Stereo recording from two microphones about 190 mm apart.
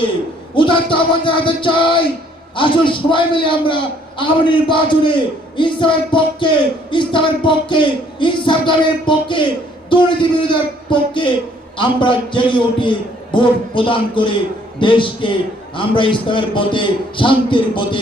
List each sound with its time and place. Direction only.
0.5 s a man's voice: 25° left (ahead or behind)